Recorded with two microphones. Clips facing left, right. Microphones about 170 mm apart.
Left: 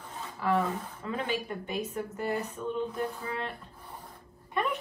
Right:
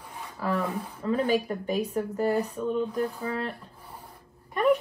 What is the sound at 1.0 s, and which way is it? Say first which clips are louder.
Speech: right 9 dB; 40° right (ahead or behind).